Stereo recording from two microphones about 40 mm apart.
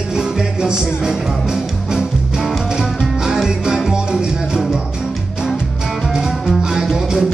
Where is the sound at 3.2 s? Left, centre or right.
Centre.